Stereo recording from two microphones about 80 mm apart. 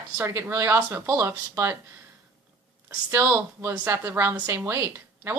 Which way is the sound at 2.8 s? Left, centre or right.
Right.